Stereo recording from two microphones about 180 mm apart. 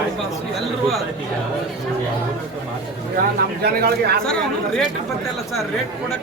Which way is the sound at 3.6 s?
60° right (ahead or behind).